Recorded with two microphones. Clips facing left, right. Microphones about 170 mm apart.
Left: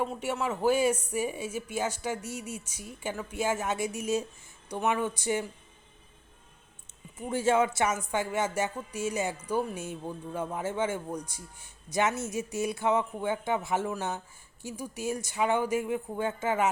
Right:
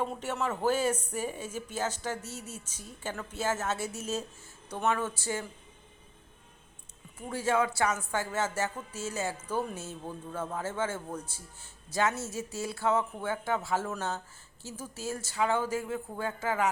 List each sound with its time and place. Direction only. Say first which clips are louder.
0.0 s speech: left 2 dB; 10° left (ahead or behind)
7.2 s speech: left 3 dB; 25° left (ahead or behind)